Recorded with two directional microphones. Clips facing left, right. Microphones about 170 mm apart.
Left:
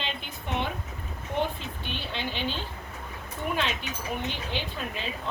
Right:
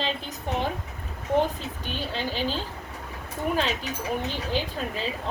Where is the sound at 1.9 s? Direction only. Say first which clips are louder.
Right 4 dB; 40° right (ahead or behind).